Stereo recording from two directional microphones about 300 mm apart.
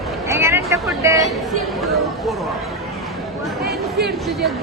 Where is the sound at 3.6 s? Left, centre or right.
Centre.